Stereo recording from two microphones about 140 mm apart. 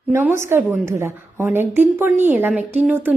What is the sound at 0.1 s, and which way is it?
A woman's voice, 20° right (ahead or behind).